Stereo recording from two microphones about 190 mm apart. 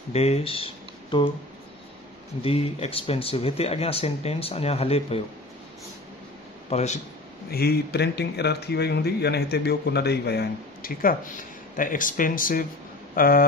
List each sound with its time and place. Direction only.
0.1 s speech: 30° left (ahead or behind)
2.4 s speech: 30° left (ahead or behind)
6.7 s speech: 35° left (ahead or behind)
7.5 s speech: 55° left (ahead or behind)